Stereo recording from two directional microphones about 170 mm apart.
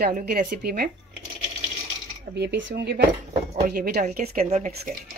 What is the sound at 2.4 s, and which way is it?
Speech, 90° right.